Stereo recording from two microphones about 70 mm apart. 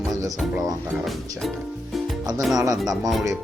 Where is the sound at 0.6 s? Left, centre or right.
Centre.